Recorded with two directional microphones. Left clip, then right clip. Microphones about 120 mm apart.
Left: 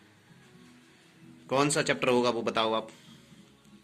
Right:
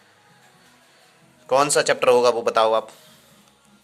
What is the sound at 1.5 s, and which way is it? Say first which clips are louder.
A man's voice: right 9 dB; 45° right (ahead or behind).